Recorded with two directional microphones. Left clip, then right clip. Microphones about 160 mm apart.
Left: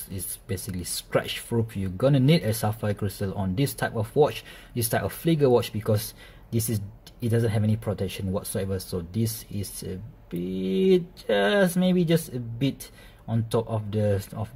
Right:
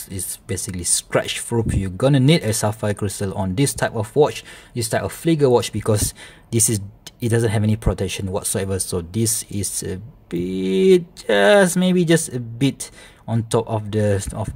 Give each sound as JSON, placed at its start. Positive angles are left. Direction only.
{"t": 0.1, "sound": "speech", "side_deg": -35}